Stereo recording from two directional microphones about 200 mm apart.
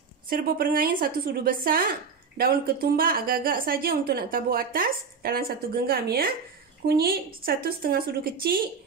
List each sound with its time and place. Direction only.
0.3 s a woman's voice: 45° right (ahead or behind)